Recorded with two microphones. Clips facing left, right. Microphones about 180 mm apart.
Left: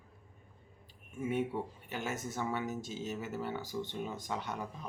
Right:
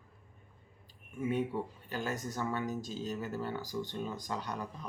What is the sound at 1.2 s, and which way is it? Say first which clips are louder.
Speech: right 1 dB; 20° left (ahead or behind).